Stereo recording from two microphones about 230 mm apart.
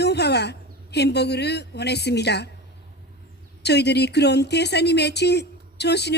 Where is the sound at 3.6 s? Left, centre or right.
Left.